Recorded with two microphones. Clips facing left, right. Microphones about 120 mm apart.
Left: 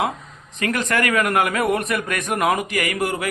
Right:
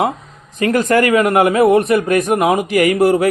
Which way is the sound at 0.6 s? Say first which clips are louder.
Right 8 dB; 30° right (ahead or behind).